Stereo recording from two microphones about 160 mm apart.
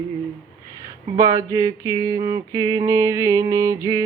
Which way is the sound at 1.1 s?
20° right (ahead or behind).